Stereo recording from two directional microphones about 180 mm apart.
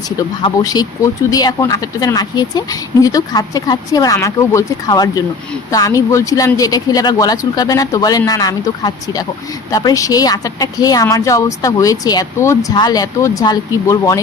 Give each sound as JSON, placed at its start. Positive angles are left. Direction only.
{"t": 0.4, "sound": "speech", "side_deg": 20}